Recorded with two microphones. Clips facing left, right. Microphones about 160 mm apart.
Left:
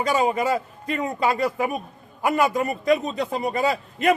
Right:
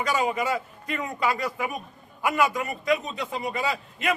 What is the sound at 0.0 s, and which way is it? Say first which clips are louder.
A man's voice: left 4 dB; 30° left (ahead or behind).